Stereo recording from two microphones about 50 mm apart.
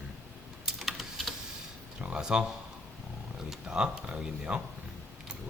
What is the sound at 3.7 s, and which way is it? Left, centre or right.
Speech, centre.